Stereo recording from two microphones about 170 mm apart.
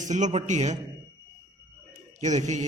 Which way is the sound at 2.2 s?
45° right (ahead or behind).